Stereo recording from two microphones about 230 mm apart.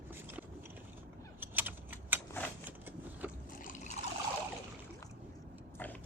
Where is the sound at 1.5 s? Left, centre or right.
Centre.